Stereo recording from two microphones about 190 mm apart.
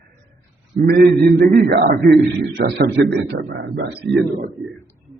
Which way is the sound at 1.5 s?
55° right (ahead or behind).